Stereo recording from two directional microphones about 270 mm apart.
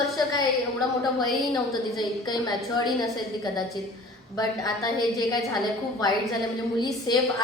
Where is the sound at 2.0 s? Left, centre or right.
Centre.